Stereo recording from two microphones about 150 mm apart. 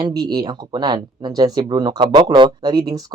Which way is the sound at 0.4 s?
30° right (ahead or behind).